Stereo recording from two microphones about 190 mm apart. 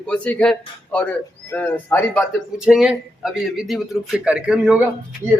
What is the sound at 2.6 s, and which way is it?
A man's voice, 5° right (ahead or behind).